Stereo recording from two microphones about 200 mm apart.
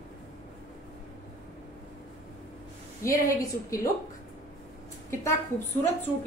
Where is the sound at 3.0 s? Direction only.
15° left (ahead or behind).